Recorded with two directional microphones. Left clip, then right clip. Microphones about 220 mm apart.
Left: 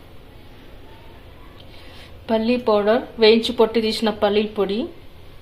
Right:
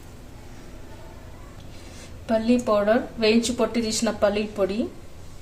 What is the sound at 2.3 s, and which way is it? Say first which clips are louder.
A woman's voice: left 3 dB; 20° left (ahead or behind).